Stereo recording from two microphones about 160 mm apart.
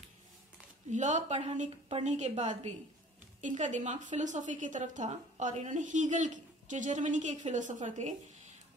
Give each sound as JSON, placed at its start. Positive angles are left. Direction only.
{"t": 0.9, "sound": "a woman's voice", "side_deg": -50}